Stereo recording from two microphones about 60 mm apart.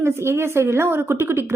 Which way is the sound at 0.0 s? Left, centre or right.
Right.